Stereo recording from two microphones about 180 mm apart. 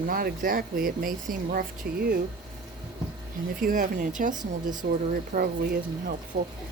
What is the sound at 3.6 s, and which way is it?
Speech, 50° right (ahead or behind).